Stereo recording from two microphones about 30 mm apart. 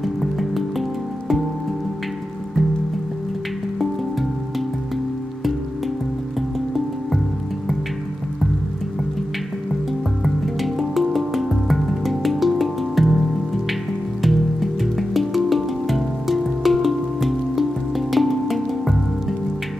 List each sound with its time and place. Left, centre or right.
0.0 s music: centre
10.2 s music: centre
14.2 s music: centre